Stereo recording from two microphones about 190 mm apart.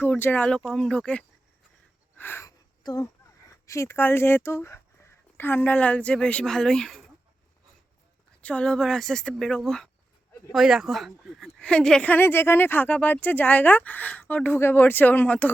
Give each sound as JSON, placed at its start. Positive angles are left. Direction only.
{"t": 0.0, "sound": "speech", "side_deg": 10}
{"t": 2.1, "sound": "a sound", "side_deg": 10}
{"t": 2.8, "sound": "speech", "side_deg": 20}
{"t": 8.4, "sound": "speech", "side_deg": 5}